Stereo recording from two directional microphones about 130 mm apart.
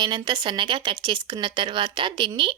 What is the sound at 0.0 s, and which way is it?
Speech, 35° right (ahead or behind).